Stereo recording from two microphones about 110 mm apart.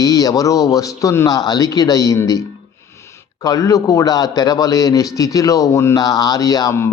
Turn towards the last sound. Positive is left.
turn(degrees=35)  # may be behind; listen again after turning